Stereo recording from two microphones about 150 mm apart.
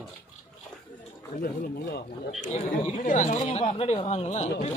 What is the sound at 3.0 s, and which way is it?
Speech, 60° left (ahead or behind).